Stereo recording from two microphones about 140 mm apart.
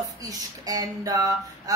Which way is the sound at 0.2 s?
25° right (ahead or behind).